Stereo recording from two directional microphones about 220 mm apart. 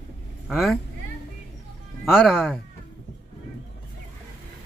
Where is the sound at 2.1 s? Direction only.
Centre (ahead or behind).